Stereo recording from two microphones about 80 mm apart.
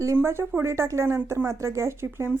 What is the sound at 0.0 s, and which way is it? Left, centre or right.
Speech, right.